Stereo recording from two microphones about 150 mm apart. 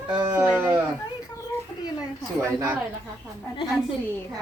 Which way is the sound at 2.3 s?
15° right (ahead or behind).